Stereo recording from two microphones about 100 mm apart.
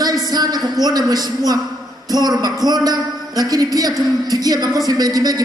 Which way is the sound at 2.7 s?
40° right (ahead or behind).